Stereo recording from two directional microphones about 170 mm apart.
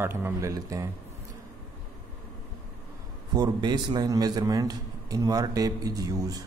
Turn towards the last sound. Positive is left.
turn(degrees=-20)  # may be behind; listen again after turning